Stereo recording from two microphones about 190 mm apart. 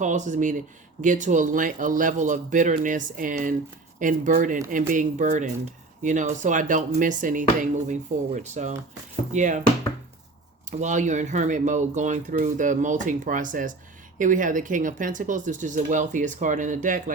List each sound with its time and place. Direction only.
0.0 s speech: 40° right (ahead or behind)
10.7 s speech: 40° right (ahead or behind)